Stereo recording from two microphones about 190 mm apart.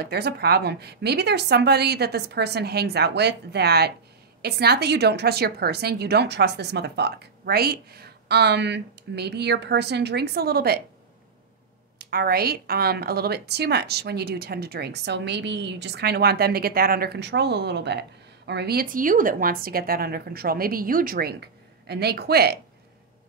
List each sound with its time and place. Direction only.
0.0 s a woman's voice: 55° right (ahead or behind)
12.0 s a woman's voice: 55° right (ahead or behind)